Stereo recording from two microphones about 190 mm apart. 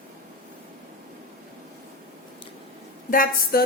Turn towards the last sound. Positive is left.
turn(degrees=50)  # may be behind; listen again after turning